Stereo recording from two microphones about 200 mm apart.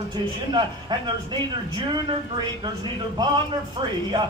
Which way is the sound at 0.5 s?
20° right (ahead or behind).